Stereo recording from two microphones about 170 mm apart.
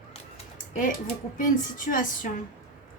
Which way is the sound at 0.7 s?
50° left (ahead or behind).